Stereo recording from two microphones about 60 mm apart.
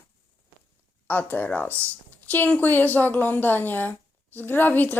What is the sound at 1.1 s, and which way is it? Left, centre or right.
Speech, left.